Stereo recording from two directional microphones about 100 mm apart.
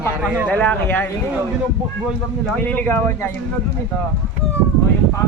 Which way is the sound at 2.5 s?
20° left (ahead or behind).